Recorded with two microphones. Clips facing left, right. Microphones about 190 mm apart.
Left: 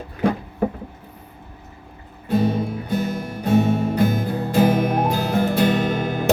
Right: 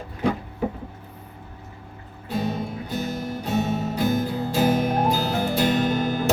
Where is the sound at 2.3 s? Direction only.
55° left (ahead or behind).